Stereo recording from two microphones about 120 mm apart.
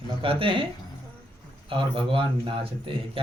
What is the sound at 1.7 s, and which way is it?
Speech, 45° right (ahead or behind).